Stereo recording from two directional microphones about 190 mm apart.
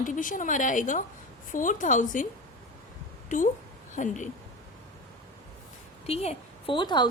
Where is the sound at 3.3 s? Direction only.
45° left (ahead or behind).